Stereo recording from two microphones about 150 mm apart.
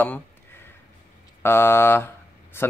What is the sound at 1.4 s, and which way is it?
Speech, 15° left (ahead or behind).